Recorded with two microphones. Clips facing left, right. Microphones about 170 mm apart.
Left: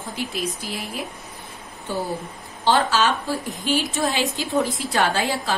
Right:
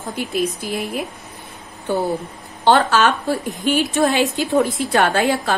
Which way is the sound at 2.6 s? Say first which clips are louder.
Right 5 dB; 60° right (ahead or behind).